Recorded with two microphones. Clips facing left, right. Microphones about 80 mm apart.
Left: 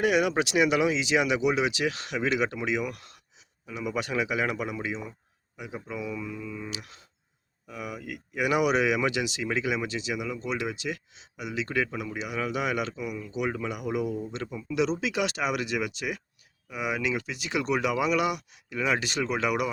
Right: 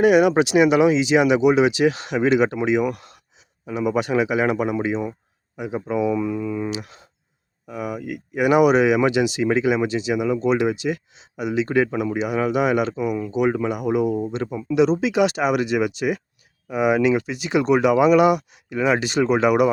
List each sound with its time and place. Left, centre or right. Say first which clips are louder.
0.0 s speech: right 9 dB; centre
3.7 s speech: right 11 dB; right
3.9 s speech: right 7 dB; centre; by 6.7 s right
6.7 s speech: right 11 dB; right
10.2 s speech: right 12 dB; right
12.2 s speech: right 9 dB; right
12.9 s speech: right 11 dB; right
13.3 s speech: right 8 dB; right
14.1 s speech: right 9 dB; right
15.0 s speech: right 9 dB; centre
16.6 s speech: right 12 dB; right
17.2 s speech: right 9 dB; centre
19.2 s speech: right 13 dB; right